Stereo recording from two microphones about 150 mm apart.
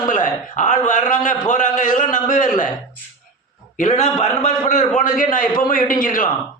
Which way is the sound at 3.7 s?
55° left (ahead or behind).